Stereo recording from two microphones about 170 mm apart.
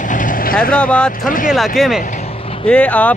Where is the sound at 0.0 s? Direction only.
50° left (ahead or behind).